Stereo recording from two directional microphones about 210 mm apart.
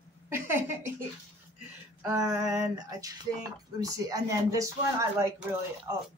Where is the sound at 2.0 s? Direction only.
15° right (ahead or behind).